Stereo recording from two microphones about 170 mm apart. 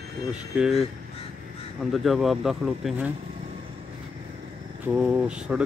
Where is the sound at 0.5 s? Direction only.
5° right (ahead or behind).